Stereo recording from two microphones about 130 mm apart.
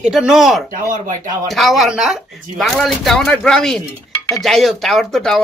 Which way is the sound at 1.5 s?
Centre (ahead or behind).